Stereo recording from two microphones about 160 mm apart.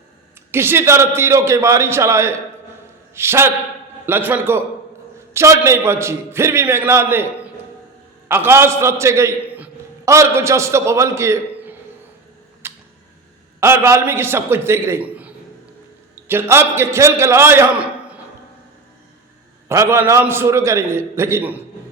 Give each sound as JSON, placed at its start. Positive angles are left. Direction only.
{"t": 0.5, "sound": "a man's voice", "side_deg": -15}
{"t": 8.3, "sound": "a man's voice", "side_deg": -15}
{"t": 12.6, "sound": "a sound", "side_deg": -15}
{"t": 13.6, "sound": "a man's voice", "side_deg": -15}
{"t": 16.3, "sound": "a man's voice", "side_deg": -15}
{"t": 19.6, "sound": "a man's voice", "side_deg": -15}